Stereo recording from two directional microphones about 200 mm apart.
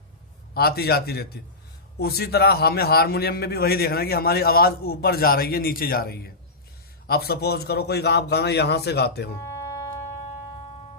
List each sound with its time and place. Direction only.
0.5 s a man's voice: 50° left (ahead or behind)
9.4 s music: 15° left (ahead or behind)